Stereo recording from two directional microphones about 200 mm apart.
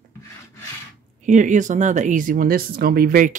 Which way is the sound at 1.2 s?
40° right (ahead or behind).